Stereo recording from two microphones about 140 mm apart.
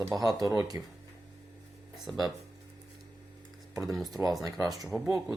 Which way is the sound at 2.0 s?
Centre (ahead or behind).